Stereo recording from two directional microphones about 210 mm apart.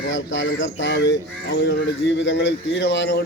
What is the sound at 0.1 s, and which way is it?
Speech, 60° left (ahead or behind).